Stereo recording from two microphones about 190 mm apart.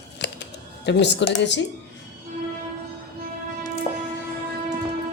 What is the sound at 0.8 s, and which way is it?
Speech, 65° left (ahead or behind).